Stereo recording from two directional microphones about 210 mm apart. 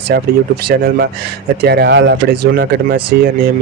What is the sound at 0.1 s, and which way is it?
Speech, 45° right (ahead or behind).